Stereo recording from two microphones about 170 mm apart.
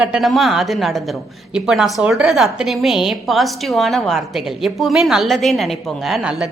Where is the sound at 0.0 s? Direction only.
5° right (ahead or behind).